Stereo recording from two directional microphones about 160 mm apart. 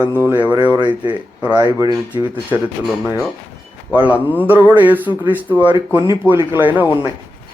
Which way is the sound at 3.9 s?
10° right (ahead or behind).